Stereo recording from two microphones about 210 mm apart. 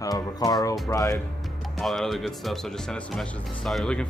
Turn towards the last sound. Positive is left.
turn(degrees=5)  # may be behind; listen again after turning